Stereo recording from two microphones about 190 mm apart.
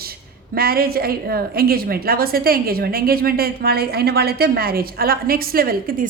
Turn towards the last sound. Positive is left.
turn(degrees=-50)  # may be behind; listen again after turning